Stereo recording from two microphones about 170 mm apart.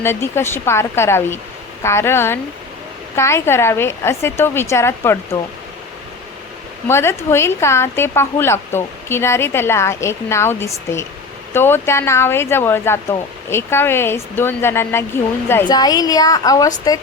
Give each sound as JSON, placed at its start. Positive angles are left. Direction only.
{"t": 0.0, "sound": "speech", "side_deg": 15}
{"t": 6.8, "sound": "a woman's voice", "side_deg": 15}